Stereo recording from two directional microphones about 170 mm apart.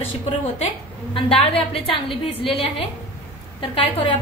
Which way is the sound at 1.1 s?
35° left (ahead or behind).